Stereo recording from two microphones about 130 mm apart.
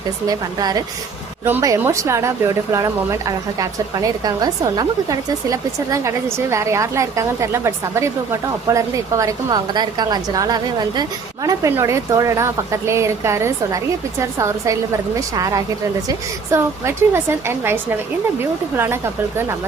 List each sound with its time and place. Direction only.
0.3 s a woman's voice: 30° right (ahead or behind)